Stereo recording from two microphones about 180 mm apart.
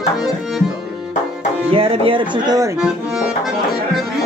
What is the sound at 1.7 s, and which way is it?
Speech, 30° right (ahead or behind).